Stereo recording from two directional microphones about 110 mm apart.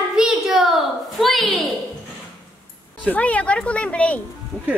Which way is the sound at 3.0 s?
15° left (ahead or behind).